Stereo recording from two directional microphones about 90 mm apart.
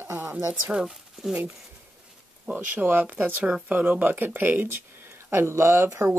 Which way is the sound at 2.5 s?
20° right (ahead or behind).